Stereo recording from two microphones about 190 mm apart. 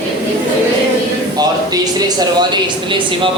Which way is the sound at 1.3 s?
20° right (ahead or behind).